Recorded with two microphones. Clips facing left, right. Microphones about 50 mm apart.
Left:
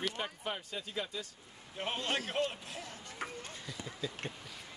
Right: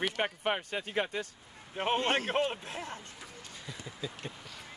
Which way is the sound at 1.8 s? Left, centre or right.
Right.